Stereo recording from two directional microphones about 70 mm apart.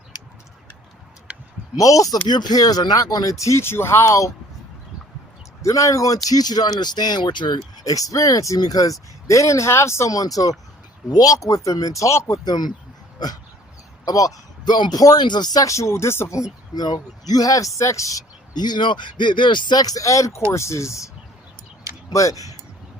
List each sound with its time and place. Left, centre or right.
1.7 s speech: left
2.2 s speech: left
5.6 s speech: left
6.2 s speech: left
7.9 s speech: left
12.5 s speech: left
13.1 s dog: left
14.0 s a sound: left
14.7 s speech: left
15.7 s speech: left
16.7 s speech: left
18.5 s speech: left
22.1 s speech: left